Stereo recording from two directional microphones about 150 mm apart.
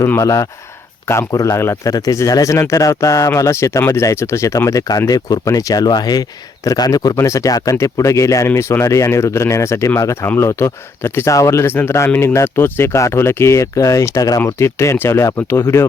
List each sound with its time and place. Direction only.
0.0 s speech: 20° left (ahead or behind)